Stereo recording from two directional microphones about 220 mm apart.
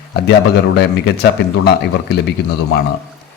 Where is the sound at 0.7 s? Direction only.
50° left (ahead or behind).